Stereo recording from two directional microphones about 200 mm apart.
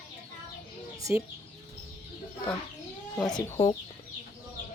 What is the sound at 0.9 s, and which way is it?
Chicken, 15° right (ahead or behind).